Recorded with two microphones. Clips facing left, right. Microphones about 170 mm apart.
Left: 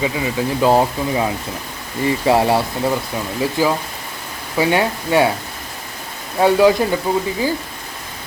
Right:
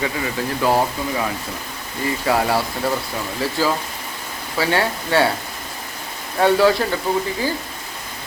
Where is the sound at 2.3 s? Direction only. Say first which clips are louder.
Left 4 dB; 25° left (ahead or behind).